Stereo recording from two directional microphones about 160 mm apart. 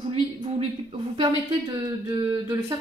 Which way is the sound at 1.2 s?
20° right (ahead or behind).